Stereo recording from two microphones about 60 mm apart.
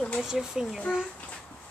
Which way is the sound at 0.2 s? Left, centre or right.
Centre.